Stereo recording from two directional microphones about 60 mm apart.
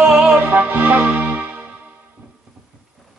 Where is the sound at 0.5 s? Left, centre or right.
Right.